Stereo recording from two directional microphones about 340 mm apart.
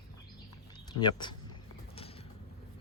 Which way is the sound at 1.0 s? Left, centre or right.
Centre.